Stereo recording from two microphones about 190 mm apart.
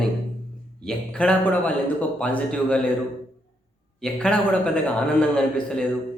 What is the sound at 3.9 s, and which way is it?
A man's voice, 5° left (ahead or behind).